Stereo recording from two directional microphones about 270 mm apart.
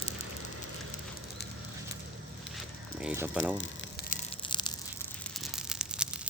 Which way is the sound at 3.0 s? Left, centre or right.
Centre.